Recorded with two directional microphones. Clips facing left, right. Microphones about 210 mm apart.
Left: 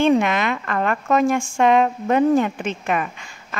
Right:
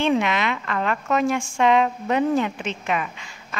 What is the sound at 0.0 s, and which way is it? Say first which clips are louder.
A woman's voice: left 4 dB; 50° left (ahead or behind).